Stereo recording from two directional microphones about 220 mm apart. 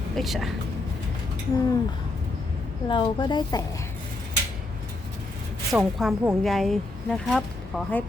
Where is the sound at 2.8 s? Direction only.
20° left (ahead or behind).